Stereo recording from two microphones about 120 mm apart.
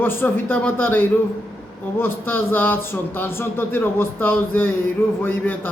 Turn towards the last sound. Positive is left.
turn(degrees=20)  # may be behind; listen again after turning